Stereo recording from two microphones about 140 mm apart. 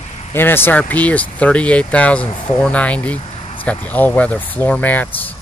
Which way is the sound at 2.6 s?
10° left (ahead or behind).